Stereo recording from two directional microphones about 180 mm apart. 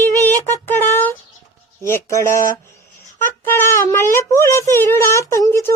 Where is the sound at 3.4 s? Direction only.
15° left (ahead or behind).